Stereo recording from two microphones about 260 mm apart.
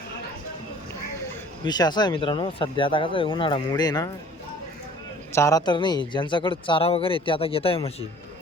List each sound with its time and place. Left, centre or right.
1.6 s speech: centre
5.3 s a man's voice: centre